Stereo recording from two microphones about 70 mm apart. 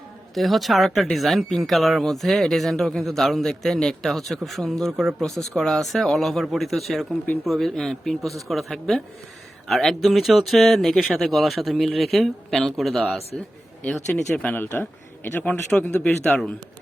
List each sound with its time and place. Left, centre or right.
0.3 s speech: centre
14.8 s a man's voice: left